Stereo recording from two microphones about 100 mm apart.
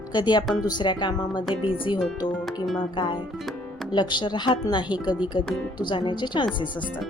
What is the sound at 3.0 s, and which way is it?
Speech, 50° left (ahead or behind).